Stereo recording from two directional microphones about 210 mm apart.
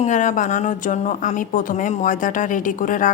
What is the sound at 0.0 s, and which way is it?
Speech, 35° left (ahead or behind).